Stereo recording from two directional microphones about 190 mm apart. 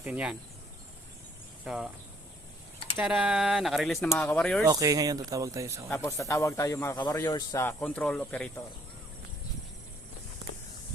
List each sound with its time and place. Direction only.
0.0 s speech: 5° right (ahead or behind)
1.6 s speech: 5° right (ahead or behind)
2.9 s speech: centre (ahead or behind)
4.7 s speech: 20° right (ahead or behind)
5.9 s speech: 15° left (ahead or behind)